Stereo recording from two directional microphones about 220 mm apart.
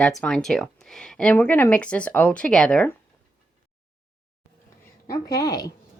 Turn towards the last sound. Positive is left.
turn(degrees=15)  # may be behind; listen again after turning